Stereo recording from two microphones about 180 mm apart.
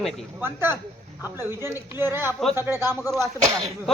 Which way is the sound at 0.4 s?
10° right (ahead or behind).